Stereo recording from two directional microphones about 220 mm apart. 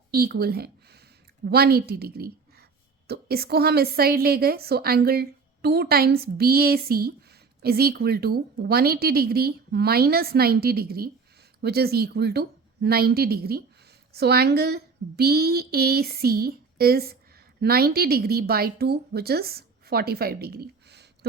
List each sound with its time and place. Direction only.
0.1 s a woman's voice: 45° right (ahead or behind)